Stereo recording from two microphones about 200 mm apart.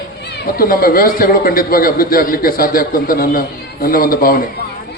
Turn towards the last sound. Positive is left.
turn(degrees=45)  # may be behind; listen again after turning